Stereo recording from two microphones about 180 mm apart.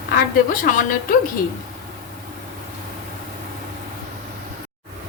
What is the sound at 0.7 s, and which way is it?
Speech, 50° left (ahead or behind).